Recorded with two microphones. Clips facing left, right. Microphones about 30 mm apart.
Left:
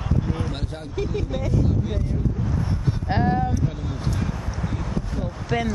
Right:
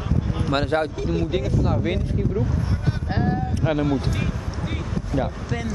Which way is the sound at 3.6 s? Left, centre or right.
Right.